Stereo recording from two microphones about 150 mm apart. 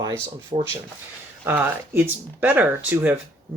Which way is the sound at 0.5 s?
35° right (ahead or behind).